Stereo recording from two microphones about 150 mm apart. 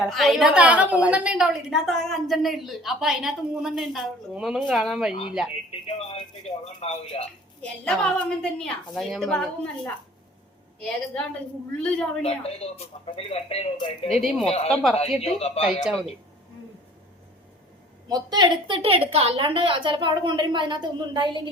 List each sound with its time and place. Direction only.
0.0 s a woman's voice: centre (ahead or behind)
5.9 s speech: 45° left (ahead or behind)
7.6 s a woman's voice: 5° left (ahead or behind)
11.8 s speech: 5° left (ahead or behind)
12.2 s speech: 40° left (ahead or behind)
14.2 s a woman's voice: centre (ahead or behind)
14.4 s speech: 45° left (ahead or behind)
14.7 s a woman's voice: centre (ahead or behind)
15.2 s speech: 45° left (ahead or behind)
15.6 s a woman's voice: centre (ahead or behind)
18.1 s a woman's voice: 30° right (ahead or behind)